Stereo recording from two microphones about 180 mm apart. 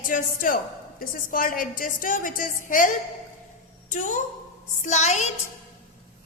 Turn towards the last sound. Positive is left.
turn(degrees=40)  # may be behind; listen again after turning